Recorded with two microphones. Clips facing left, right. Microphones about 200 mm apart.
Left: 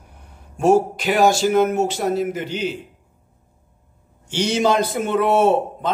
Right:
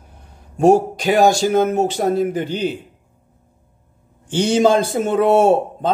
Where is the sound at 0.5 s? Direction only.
40° right (ahead or behind).